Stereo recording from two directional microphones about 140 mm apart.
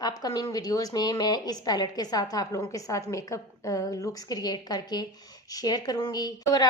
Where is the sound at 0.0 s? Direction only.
25° left (ahead or behind).